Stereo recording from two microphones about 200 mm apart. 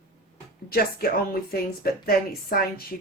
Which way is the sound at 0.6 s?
50° left (ahead or behind).